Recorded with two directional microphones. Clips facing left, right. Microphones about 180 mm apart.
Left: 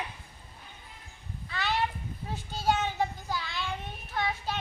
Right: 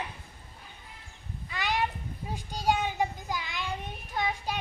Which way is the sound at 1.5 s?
15° right (ahead or behind).